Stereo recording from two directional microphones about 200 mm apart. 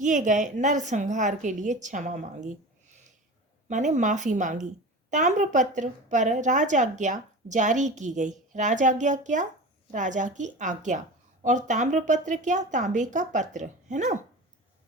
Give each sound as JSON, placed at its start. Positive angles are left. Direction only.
{"t": 0.0, "sound": "a woman's voice", "side_deg": -40}